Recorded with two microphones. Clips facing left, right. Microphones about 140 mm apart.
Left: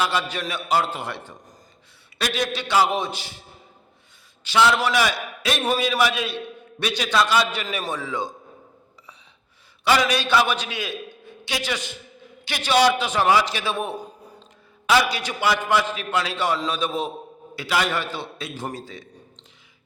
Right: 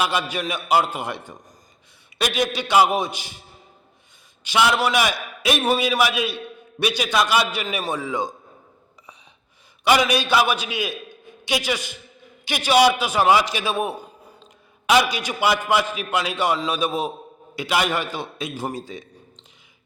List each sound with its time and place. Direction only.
0.0 s a man's voice: 15° right (ahead or behind)
4.4 s a man's voice: 15° right (ahead or behind)
9.8 s a man's voice: 15° right (ahead or behind)
14.8 s a man's voice: 15° right (ahead or behind)